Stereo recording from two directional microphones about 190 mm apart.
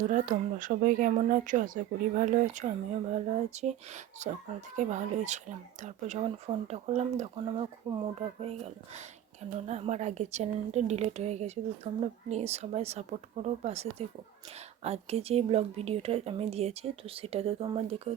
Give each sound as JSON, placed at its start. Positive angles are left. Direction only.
{"t": 0.1, "sound": "speech", "side_deg": -45}
{"t": 14.8, "sound": "speech", "side_deg": -35}